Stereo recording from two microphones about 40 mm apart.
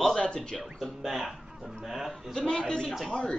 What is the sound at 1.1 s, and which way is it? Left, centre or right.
Speech, centre.